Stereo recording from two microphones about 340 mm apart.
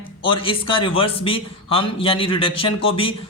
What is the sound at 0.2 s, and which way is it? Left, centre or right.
A man's voice, centre.